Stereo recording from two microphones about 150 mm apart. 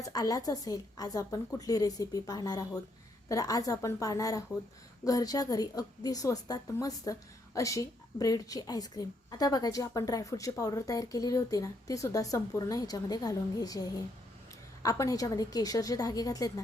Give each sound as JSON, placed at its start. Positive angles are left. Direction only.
{"t": 0.0, "sound": "a woman's voice", "side_deg": 25}